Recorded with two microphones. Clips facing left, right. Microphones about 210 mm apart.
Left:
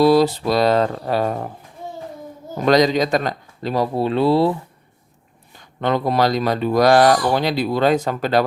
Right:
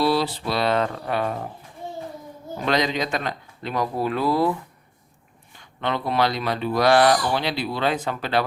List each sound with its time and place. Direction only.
0.0 s speech: 45° left (ahead or behind)
2.6 s speech: 40° left (ahead or behind)
5.5 s speech: 40° left (ahead or behind)